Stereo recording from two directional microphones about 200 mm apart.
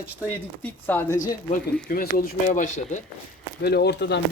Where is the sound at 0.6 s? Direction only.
10° left (ahead or behind).